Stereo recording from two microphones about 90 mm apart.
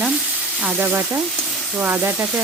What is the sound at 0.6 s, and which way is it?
Speech, 15° right (ahead or behind).